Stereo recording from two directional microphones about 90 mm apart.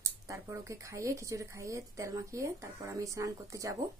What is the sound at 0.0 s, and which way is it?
A woman's voice, 35° right (ahead or behind).